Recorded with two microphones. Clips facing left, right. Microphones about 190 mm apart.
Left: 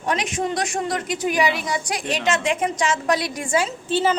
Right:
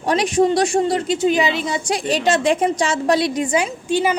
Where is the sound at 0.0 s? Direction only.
35° right (ahead or behind).